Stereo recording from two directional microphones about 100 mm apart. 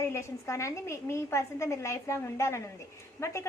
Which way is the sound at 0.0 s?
30° left (ahead or behind).